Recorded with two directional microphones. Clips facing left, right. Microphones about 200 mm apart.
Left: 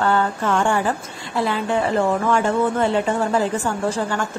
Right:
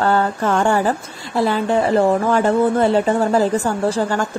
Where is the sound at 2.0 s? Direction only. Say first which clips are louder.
Right 3 dB; 35° right (ahead or behind).